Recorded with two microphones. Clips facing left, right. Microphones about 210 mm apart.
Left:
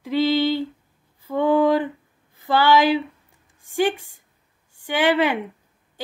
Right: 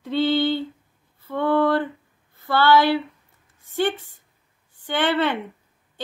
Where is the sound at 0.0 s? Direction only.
10° left (ahead or behind).